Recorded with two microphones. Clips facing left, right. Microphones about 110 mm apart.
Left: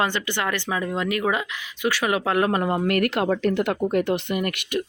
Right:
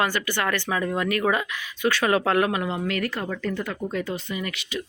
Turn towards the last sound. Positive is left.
turn(degrees=60)  # may be behind; listen again after turning